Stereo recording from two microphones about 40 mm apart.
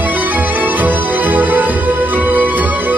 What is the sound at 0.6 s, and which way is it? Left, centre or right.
Music, right.